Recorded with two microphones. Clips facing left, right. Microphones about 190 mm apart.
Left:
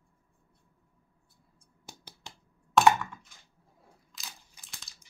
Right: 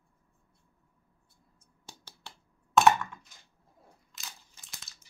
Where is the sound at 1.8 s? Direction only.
15° left (ahead or behind).